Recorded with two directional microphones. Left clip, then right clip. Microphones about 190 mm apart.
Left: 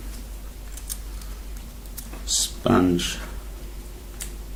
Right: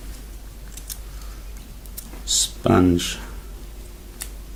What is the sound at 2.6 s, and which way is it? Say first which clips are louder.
Speech: right 2 dB; 45° right (ahead or behind).